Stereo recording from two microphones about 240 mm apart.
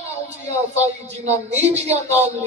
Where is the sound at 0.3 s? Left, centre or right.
Right.